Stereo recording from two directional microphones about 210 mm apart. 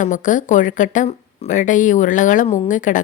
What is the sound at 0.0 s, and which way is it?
Speech, 35° left (ahead or behind).